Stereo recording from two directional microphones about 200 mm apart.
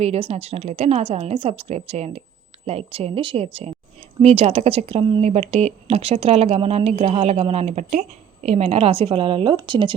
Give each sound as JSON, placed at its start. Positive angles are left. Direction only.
{"t": 0.0, "sound": "a woman's voice", "side_deg": -30}